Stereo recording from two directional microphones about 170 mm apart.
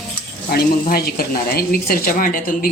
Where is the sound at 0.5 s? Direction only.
70° left (ahead or behind).